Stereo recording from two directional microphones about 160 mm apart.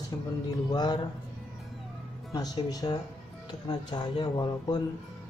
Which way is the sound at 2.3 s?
25° left (ahead or behind).